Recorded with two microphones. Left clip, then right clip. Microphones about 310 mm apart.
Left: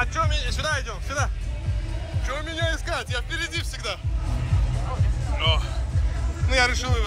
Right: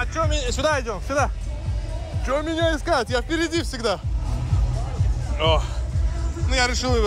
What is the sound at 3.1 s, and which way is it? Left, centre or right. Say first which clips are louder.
Speech: right 6 dB; right.